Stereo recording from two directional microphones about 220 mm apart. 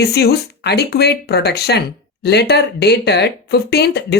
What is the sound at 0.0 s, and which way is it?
Speech, 45° left (ahead or behind).